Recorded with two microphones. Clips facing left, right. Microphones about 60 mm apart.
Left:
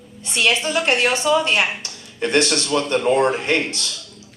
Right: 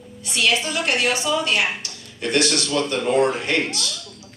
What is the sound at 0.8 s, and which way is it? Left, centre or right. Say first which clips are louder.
A man's voice: left 4 dB; left.